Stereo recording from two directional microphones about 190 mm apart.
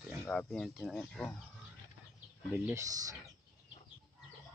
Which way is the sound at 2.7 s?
15° right (ahead or behind).